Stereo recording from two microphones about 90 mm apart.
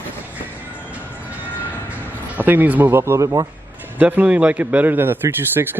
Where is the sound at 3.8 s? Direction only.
20° right (ahead or behind).